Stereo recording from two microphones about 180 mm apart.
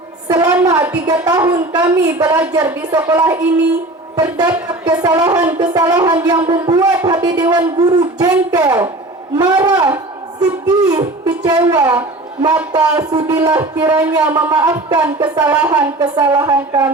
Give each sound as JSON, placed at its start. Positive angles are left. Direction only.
{"t": 0.3, "sound": "a sound", "side_deg": -20}
{"t": 1.0, "sound": "speech", "side_deg": -20}
{"t": 11.4, "sound": "a woman's voice", "side_deg": -20}
{"t": 15.4, "sound": "speech", "side_deg": -10}
{"t": 16.0, "sound": "speech", "side_deg": -20}